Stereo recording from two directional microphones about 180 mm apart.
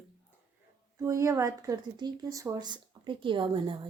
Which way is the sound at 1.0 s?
15° right (ahead or behind).